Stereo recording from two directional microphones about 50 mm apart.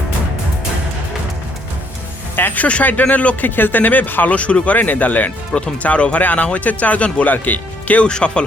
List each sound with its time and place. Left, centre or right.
2.3 s speech: left; by 8.4 s centre